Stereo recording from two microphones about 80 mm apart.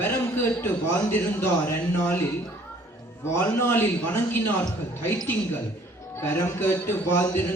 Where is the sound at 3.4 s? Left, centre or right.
Left.